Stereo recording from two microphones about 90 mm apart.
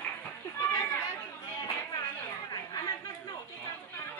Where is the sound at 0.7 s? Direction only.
30° left (ahead or behind).